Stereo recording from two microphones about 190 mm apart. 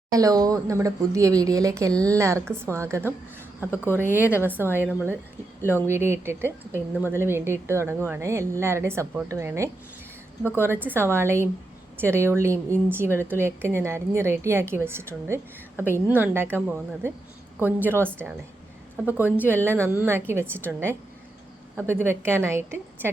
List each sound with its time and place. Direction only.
0.1 s a woman's voice: 20° right (ahead or behind)
2.4 s a woman's voice: 5° left (ahead or behind)
2.6 s a woman's voice: 15° right (ahead or behind)
3.6 s speech: 10° left (ahead or behind)
3.9 s a woman's voice: 10° right (ahead or behind)
5.6 s speech: 10° left (ahead or behind)
5.9 s a woman's voice: 15° right (ahead or behind)